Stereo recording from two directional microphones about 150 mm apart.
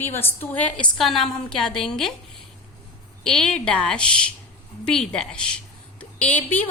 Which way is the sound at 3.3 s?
5° left (ahead or behind).